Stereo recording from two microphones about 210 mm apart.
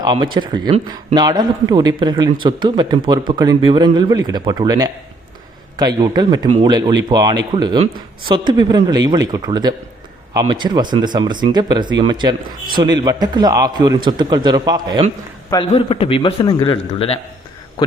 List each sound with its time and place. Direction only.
0.0 s a man's voice: 20° right (ahead or behind)
15.7 s a man's voice: 25° left (ahead or behind)